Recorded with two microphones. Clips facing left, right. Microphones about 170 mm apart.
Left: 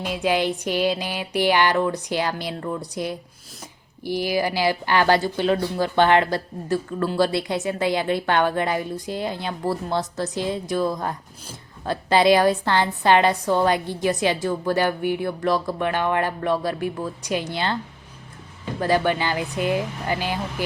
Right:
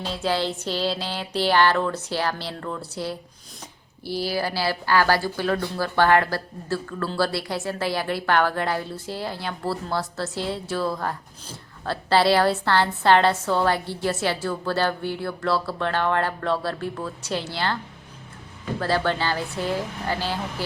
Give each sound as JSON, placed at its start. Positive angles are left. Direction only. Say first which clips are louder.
{"t": 0.0, "sound": "speech", "louder": "left 3 dB", "side_deg": 15}
{"t": 18.8, "sound": "speech", "louder": "left 3 dB", "side_deg": 15}